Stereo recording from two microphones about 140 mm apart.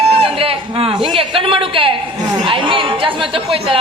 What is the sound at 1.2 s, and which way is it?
Speech, 40° right (ahead or behind).